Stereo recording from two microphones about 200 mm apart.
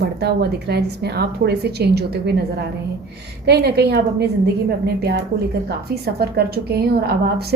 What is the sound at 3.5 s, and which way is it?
Speech, 55° right (ahead or behind).